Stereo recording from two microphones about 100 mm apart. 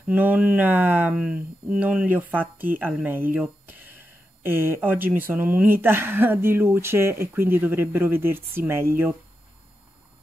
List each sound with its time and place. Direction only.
0.0 s speech: 15° right (ahead or behind)